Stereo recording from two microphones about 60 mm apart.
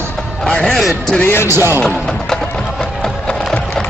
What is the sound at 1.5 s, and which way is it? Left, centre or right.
Speech, right.